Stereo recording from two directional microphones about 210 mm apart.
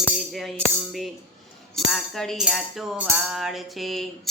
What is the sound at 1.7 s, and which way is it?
Music, centre (ahead or behind).